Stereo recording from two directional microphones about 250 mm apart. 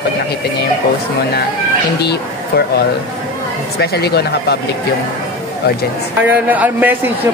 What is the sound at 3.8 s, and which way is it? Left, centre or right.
Speech, left.